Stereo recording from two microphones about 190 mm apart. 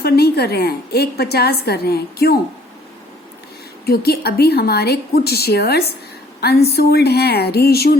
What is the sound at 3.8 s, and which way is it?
A woman's voice, 55° left (ahead or behind).